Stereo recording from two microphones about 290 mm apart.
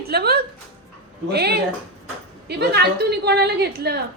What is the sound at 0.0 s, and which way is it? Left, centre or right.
A woman's voice, right.